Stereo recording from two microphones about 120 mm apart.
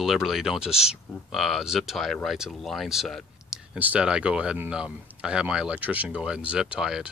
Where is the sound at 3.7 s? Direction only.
10° right (ahead or behind).